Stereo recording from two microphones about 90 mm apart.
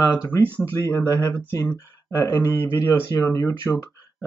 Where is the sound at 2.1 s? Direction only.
35° left (ahead or behind).